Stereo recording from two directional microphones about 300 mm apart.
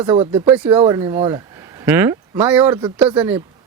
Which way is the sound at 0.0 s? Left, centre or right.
Centre.